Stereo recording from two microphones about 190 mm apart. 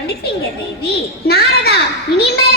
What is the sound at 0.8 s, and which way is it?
Speech, 55° left (ahead or behind).